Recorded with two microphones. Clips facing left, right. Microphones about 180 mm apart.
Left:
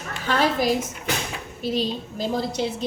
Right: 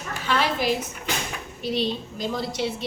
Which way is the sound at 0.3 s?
40° left (ahead or behind).